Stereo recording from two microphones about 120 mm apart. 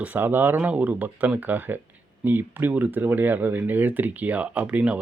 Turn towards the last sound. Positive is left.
turn(degrees=-10)  # may be behind; listen again after turning